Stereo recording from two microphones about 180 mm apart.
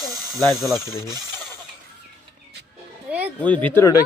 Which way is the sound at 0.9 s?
20° right (ahead or behind).